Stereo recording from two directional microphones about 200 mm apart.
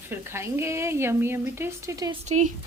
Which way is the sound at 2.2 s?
35° right (ahead or behind).